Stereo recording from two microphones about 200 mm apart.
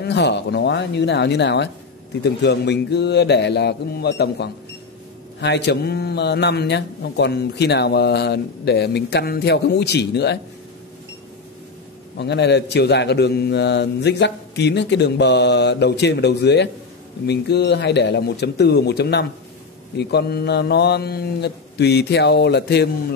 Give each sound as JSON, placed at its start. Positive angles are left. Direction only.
{"t": 0.0, "sound": "speech", "side_deg": 60}
{"t": 12.2, "sound": "speech", "side_deg": 60}